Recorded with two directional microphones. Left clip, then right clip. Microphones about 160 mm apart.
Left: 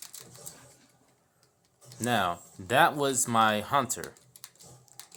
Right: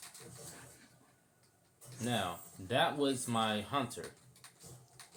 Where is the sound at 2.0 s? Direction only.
55° left (ahead or behind).